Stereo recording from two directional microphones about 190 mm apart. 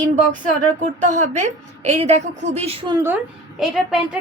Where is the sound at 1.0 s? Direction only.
40° right (ahead or behind); by 3.1 s 25° right (ahead or behind).